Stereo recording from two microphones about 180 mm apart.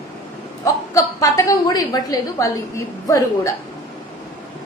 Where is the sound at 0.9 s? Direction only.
20° left (ahead or behind).